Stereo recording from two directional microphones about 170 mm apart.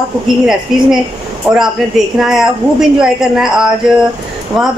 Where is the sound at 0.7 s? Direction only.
Centre (ahead or behind).